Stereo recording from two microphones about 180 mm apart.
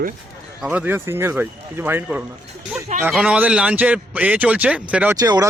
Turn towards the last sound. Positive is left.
turn(degrees=-20)  # may be behind; listen again after turning